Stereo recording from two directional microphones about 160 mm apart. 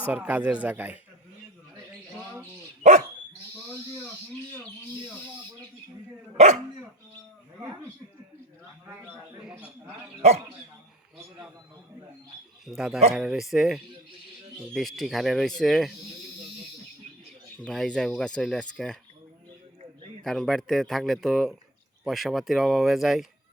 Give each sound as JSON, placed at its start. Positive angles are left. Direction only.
{"t": 0.0, "sound": "speech", "side_deg": -10}
{"t": 6.3, "sound": "speech", "side_deg": -45}
{"t": 9.4, "sound": "speech", "side_deg": -5}
{"t": 12.6, "sound": "speech", "side_deg": -5}
{"t": 17.6, "sound": "speech", "side_deg": 5}
{"t": 20.2, "sound": "speech", "side_deg": 5}